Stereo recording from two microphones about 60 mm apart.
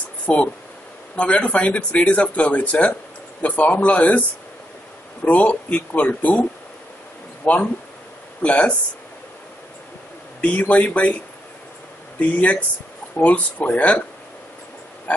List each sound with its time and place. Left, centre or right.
0.3 s speech: left
5.2 s speech: left
7.4 s speech: left
10.4 s speech: left
15.1 s speech: left